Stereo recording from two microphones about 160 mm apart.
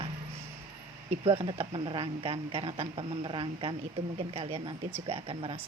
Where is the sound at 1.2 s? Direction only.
35° right (ahead or behind).